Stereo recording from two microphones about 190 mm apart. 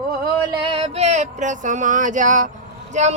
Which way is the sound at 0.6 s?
30° right (ahead or behind).